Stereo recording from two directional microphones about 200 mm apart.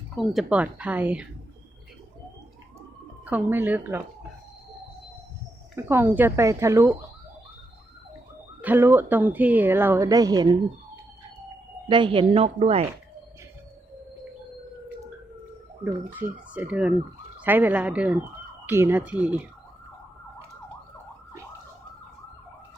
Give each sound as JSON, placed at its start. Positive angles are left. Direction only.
{"t": 0.2, "sound": "a woman's voice", "side_deg": -5}
{"t": 3.2, "sound": "a woman's voice", "side_deg": -10}
{"t": 5.7, "sound": "a woman's voice", "side_deg": -10}
{"t": 8.6, "sound": "a woman's voice", "side_deg": -10}
{"t": 11.9, "sound": "a woman's voice", "side_deg": -25}
{"t": 16.1, "sound": "a woman's voice", "side_deg": -5}